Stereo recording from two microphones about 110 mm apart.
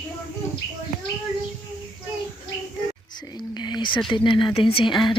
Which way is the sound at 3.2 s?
40° left (ahead or behind).